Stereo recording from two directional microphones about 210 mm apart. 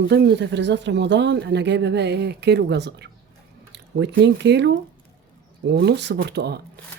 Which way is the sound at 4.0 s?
55° right (ahead or behind).